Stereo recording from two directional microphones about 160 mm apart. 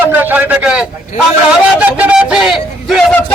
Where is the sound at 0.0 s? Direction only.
10° right (ahead or behind).